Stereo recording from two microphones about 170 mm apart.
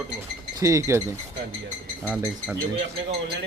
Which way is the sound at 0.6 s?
15° right (ahead or behind).